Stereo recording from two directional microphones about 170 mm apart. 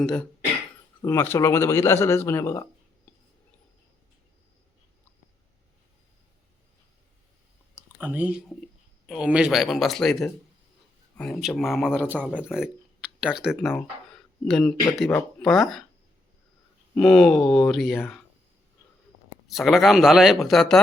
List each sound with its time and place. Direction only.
0.0 s speech: 5° left (ahead or behind)
1.0 s speech: 15° left (ahead or behind)
7.9 s speech: 10° right (ahead or behind)
16.9 s speech: 5° left (ahead or behind)
19.5 s speech: centre (ahead or behind)